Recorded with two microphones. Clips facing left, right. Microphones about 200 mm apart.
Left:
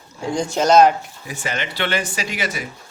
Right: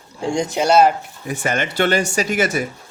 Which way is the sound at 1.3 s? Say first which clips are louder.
Right 5 dB; 50° right (ahead or behind).